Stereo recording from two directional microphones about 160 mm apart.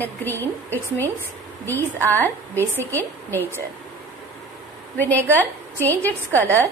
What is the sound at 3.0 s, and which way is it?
Speech, 10° left (ahead or behind).